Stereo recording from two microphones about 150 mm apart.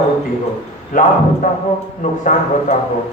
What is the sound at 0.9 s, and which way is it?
A man's voice, 60° left (ahead or behind).